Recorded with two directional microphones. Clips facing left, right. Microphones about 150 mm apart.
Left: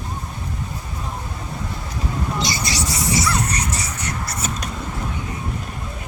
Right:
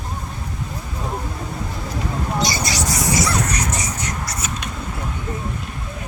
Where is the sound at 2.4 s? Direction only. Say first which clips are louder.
Right 2 dB; 25° left (ahead or behind).